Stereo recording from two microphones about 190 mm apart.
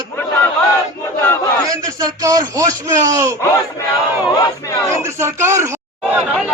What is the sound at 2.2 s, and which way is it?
A man's voice, 20° right (ahead or behind).